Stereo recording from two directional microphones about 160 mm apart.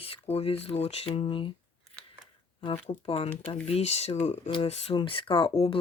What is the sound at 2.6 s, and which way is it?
Speech, 35° left (ahead or behind).